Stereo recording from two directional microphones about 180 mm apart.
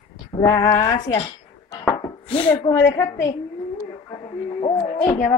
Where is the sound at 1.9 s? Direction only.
30° left (ahead or behind).